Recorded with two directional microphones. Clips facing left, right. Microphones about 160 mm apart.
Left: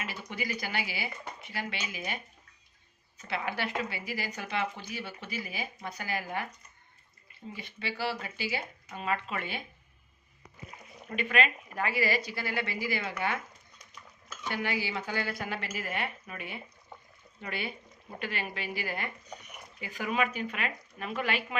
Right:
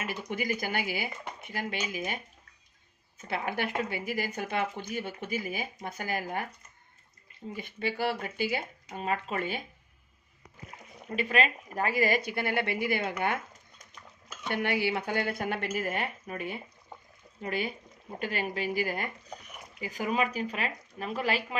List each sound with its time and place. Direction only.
0.0 s speech: 50° right (ahead or behind)
3.2 s speech: 50° right (ahead or behind)
7.5 s speech: 50° right (ahead or behind)
8.9 s speech: 40° right (ahead or behind)
11.1 s speech: 35° right (ahead or behind)